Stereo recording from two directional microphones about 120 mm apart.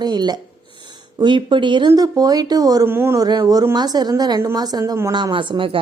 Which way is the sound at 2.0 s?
30° right (ahead or behind).